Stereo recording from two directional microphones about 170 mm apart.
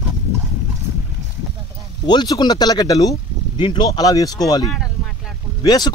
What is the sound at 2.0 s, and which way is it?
Speech, 25° left (ahead or behind).